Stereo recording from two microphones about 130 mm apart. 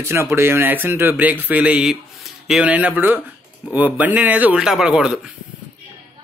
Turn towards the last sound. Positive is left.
turn(degrees=-5)  # may be behind; listen again after turning